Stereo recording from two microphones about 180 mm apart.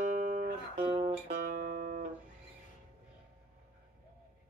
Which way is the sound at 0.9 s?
35° right (ahead or behind).